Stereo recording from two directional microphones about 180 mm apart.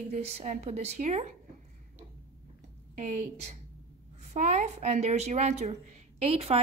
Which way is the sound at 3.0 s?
40° right (ahead or behind).